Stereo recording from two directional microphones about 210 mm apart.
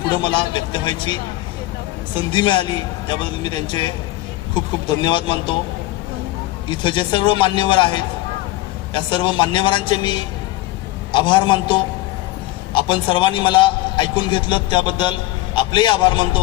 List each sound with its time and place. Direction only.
0.2 s a man's voice: 20° left (ahead or behind)
2.3 s a man's voice: 20° left (ahead or behind)
6.7 s a man's voice: 20° left (ahead or behind)